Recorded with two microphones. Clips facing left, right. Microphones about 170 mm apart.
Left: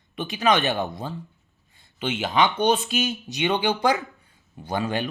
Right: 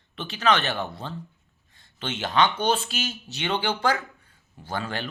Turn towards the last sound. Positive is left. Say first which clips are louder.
# left 5 dB
turn(degrees=15)  # may be behind; listen again after turning